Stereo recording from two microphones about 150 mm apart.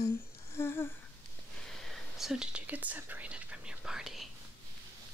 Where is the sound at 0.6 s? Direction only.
15° left (ahead or behind).